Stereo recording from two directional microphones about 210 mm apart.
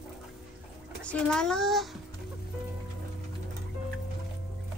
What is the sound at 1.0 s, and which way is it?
Speech, 5° left (ahead or behind).